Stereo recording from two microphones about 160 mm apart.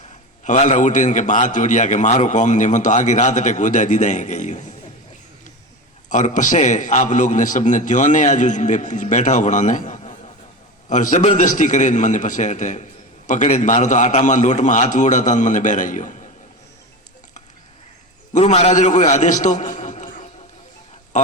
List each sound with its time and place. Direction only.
0.4 s a man's voice: 50° left (ahead or behind)
6.1 s a man's voice: 50° left (ahead or behind)
18.3 s a man's voice: 45° left (ahead or behind)